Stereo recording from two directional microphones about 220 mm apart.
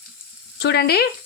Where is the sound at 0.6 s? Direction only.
50° left (ahead or behind).